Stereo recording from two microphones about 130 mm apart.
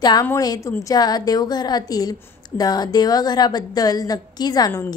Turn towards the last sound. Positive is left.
turn(degrees=30)  # may be behind; listen again after turning